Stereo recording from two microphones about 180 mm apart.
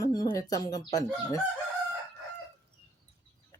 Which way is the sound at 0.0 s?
20° left (ahead or behind).